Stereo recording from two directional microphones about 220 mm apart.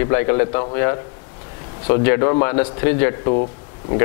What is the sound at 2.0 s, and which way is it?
Speech, 25° left (ahead or behind).